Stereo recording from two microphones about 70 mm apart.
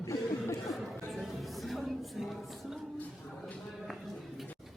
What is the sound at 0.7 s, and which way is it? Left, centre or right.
Chatter, centre.